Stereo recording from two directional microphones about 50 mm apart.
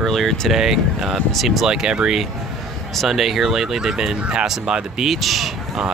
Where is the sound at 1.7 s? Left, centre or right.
Centre.